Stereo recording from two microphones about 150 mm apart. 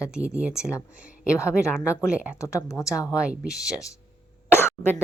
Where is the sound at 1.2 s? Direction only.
20° left (ahead or behind).